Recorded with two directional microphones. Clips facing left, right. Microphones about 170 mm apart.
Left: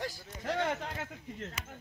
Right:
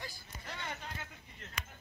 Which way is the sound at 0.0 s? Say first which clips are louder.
Left 10 dB; 80° left.